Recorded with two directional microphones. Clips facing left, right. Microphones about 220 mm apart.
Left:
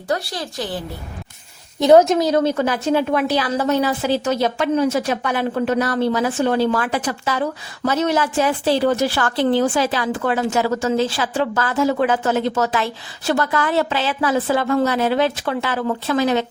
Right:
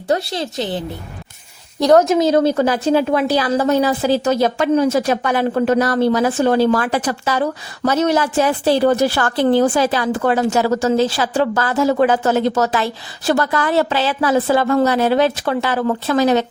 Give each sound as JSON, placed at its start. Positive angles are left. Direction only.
{"t": 0.1, "sound": "a woman's voice", "side_deg": -25}
{"t": 1.8, "sound": "a woman's voice", "side_deg": 10}
{"t": 2.1, "sound": "a woman's voice", "side_deg": -25}
{"t": 2.4, "sound": "a woman's voice", "side_deg": -35}